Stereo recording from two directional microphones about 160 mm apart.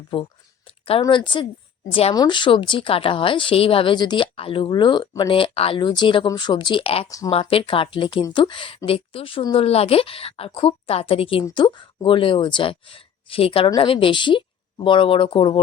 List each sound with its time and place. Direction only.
0.1 s speech: 35° left (ahead or behind)